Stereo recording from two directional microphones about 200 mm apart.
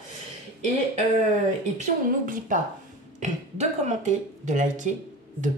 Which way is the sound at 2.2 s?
40° right (ahead or behind).